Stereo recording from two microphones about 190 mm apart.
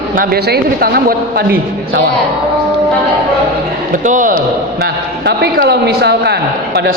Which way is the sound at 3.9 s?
45° right (ahead or behind).